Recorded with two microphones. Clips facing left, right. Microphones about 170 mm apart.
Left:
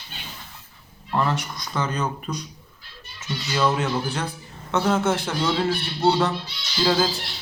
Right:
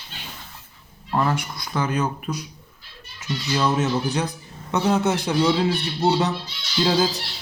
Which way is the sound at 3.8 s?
15° right (ahead or behind).